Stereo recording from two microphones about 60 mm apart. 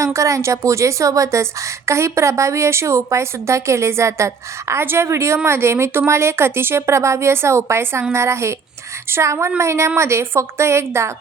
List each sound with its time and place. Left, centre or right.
0.0 s a woman's voice: right